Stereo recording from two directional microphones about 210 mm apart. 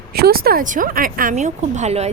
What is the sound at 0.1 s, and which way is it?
Speech, 45° right (ahead or behind).